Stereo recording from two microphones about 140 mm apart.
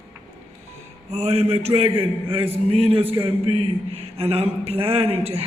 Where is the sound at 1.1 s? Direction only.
50° right (ahead or behind).